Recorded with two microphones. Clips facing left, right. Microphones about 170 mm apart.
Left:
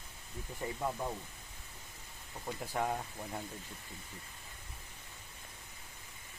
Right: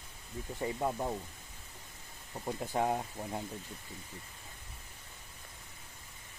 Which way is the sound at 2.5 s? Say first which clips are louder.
Right 4 dB; 25° right (ahead or behind).